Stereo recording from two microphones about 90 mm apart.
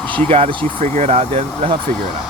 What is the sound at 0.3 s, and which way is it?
Speech, 90° right.